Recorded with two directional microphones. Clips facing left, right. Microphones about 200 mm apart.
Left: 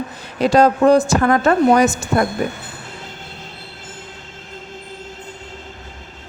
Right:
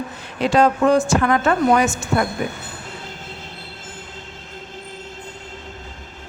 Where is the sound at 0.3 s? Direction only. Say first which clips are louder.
Left 3 dB; 40° left (ahead or behind).